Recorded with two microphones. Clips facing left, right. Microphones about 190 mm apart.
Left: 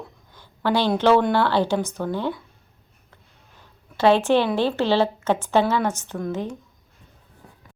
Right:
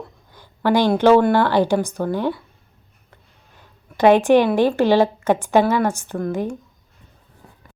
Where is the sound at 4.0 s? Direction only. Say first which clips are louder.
Right 4 dB; 15° right (ahead or behind).